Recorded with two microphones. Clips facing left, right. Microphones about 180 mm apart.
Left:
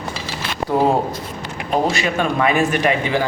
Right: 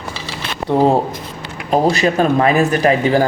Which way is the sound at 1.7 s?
40° right (ahead or behind).